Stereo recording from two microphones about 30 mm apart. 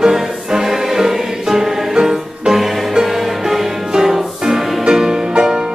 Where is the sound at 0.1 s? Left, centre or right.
Centre.